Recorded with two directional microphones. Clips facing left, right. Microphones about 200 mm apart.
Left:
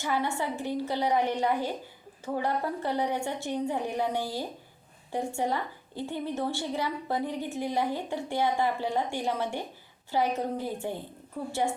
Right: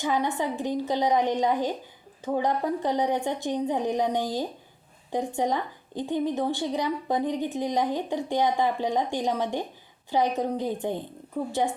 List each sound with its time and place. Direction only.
0.0 s a woman's voice: 15° right (ahead or behind)